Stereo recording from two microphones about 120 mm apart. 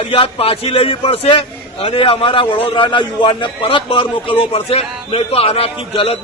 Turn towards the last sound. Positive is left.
turn(degrees=50)  # may be behind; listen again after turning